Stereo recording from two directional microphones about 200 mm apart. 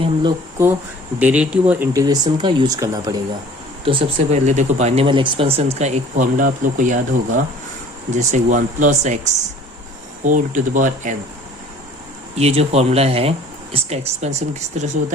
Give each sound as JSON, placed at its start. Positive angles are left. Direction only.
{"t": 0.0, "sound": "a sound", "side_deg": -20}
{"t": 0.6, "sound": "speech", "side_deg": -10}
{"t": 3.8, "sound": "speech", "side_deg": -30}
{"t": 12.3, "sound": "speech", "side_deg": -30}